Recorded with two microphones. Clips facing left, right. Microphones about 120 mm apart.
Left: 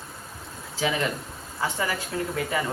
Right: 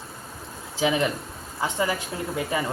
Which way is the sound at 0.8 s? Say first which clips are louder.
Right 3 dB; 20° right (ahead or behind).